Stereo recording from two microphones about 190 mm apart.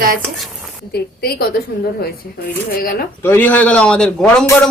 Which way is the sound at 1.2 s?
55° left (ahead or behind).